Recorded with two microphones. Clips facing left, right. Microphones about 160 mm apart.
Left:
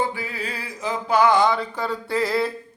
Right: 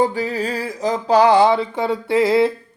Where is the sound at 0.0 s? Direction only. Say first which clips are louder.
Right 8 dB; 40° right (ahead or behind).